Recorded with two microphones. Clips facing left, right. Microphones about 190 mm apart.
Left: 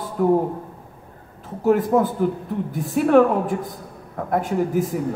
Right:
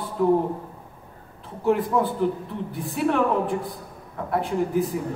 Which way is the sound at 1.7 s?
45° left (ahead or behind).